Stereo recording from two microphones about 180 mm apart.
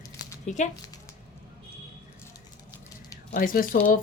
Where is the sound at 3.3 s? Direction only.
50° left (ahead or behind).